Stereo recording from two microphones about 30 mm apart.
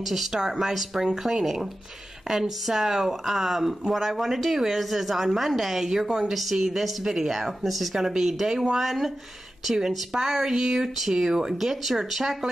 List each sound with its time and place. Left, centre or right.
0.0 s speech: centre
9.7 s speech: centre
11.2 s speech: centre
11.5 s speech: centre